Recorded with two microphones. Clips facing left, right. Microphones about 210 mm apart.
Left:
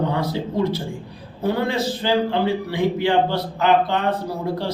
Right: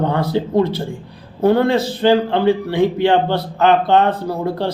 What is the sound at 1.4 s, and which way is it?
A man's voice, 60° right (ahead or behind).